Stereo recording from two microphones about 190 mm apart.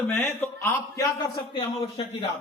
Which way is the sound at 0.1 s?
15° left (ahead or behind).